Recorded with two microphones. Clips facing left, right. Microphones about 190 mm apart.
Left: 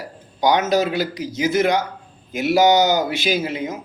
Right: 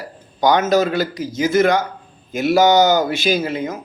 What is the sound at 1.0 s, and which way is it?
Speech, 45° right (ahead or behind).